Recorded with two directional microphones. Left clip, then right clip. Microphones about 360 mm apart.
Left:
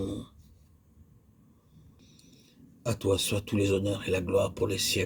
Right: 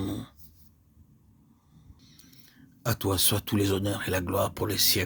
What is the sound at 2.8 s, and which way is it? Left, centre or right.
Speech, right.